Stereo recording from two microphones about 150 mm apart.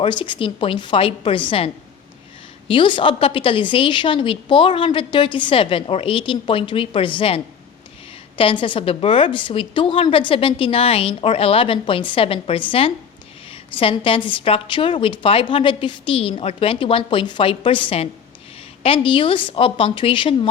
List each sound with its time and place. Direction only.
0.0 s a woman's voice: 35° left (ahead or behind)
8.6 s a woman's voice: 35° left (ahead or behind)